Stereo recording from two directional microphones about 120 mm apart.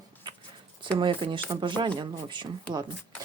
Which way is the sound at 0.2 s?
35° right (ahead or behind).